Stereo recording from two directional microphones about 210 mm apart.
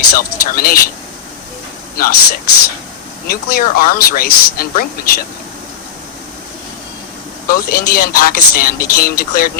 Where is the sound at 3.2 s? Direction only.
45° left (ahead or behind).